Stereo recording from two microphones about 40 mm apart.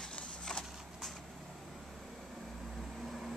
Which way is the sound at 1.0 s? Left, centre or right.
Centre.